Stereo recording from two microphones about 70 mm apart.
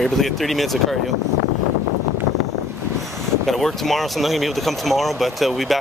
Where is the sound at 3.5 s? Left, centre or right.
Centre.